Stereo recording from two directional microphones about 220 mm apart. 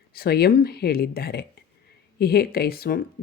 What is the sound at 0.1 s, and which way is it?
Speech, 45° left (ahead or behind).